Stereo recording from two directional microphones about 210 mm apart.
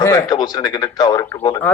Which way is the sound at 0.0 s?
15° left (ahead or behind).